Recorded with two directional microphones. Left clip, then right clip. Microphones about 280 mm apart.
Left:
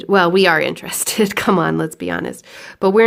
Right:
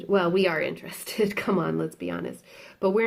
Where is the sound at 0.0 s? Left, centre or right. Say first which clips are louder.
Left 10 dB; left.